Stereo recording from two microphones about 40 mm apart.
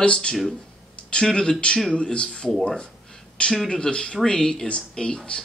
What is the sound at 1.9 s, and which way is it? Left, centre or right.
A man's voice, left.